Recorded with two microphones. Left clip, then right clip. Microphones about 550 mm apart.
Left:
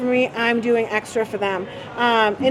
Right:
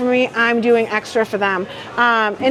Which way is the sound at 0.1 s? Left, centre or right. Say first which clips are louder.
Right 2 dB; right.